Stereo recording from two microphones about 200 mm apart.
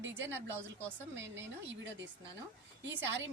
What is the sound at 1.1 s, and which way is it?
Speech, 65° right (ahead or behind).